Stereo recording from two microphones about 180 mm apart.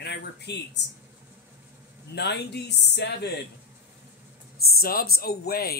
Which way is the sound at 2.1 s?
65° left (ahead or behind).